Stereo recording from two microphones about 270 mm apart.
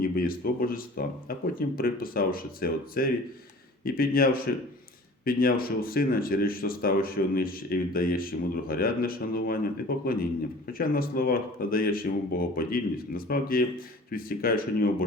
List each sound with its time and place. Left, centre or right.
0.0 s speech: left
10.7 s speech: left